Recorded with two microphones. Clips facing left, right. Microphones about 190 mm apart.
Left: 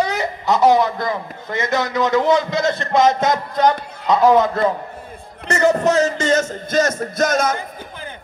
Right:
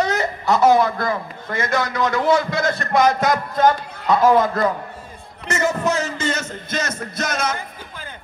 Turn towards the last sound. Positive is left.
turn(degrees=45)  # may be behind; listen again after turning